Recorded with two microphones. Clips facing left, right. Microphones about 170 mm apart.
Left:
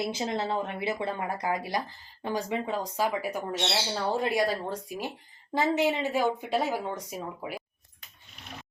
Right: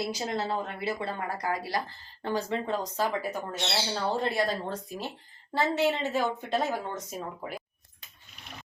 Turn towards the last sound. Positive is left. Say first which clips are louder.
# left 1 dB
turn(degrees=0)  # may be behind; listen again after turning